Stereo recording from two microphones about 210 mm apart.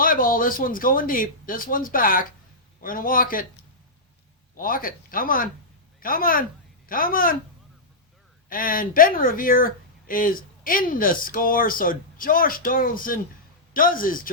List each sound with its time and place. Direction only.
0.0 s speech: 40° left (ahead or behind)
4.5 s speech: 40° left (ahead or behind)
8.4 s speech: 40° left (ahead or behind)